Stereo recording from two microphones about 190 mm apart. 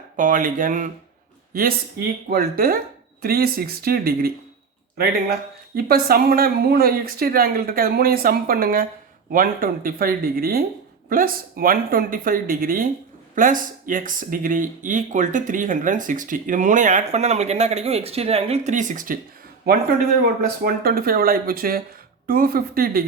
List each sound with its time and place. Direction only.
0.2 s speech: 45° right (ahead or behind)
2.3 s speech: 50° right (ahead or behind)
20.2 s speech: 55° right (ahead or behind)